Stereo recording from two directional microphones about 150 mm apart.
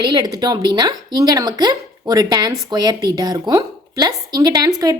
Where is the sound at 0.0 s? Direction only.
30° right (ahead or behind).